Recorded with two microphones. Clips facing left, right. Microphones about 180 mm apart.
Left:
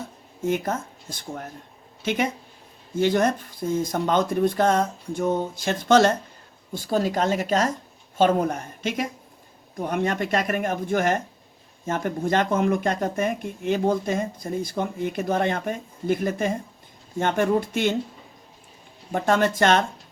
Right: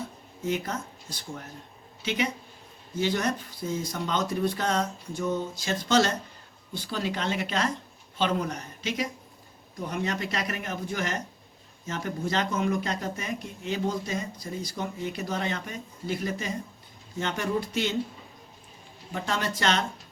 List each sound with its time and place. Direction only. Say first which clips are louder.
0.4 s speech: left 5 dB; 50° left (ahead or behind)
19.1 s speech: left 9 dB; 50° left (ahead or behind)